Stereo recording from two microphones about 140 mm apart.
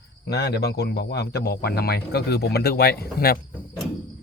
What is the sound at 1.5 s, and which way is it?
Speech, 90° left.